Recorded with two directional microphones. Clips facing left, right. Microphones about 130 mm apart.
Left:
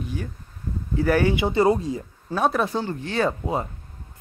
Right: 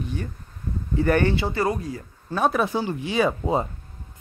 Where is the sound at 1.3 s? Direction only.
20° left (ahead or behind).